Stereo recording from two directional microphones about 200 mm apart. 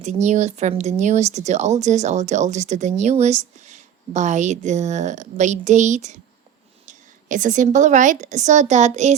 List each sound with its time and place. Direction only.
0.0 s a woman's voice: 35° right (ahead or behind)